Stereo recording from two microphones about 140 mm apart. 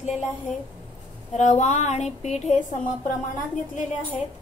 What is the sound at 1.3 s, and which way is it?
A woman's voice, 55° left (ahead or behind).